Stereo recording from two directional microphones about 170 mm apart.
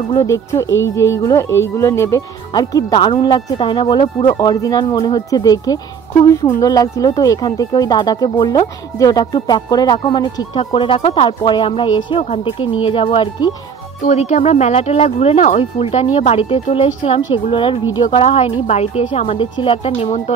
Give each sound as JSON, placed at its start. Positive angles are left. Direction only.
{"t": 0.1, "sound": "a woman's voice", "side_deg": 20}
{"t": 0.7, "sound": "speech", "side_deg": 90}
{"t": 0.9, "sound": "a woman's voice", "side_deg": 15}
{"t": 14.0, "sound": "speech", "side_deg": 40}